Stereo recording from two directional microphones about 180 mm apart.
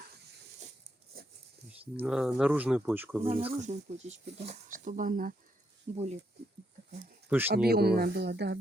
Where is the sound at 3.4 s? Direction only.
40° right (ahead or behind).